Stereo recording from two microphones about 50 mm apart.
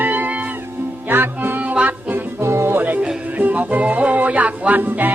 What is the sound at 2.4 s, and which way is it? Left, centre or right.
Music, right.